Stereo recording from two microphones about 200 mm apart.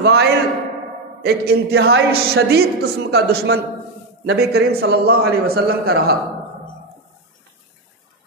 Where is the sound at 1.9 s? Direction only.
80° right.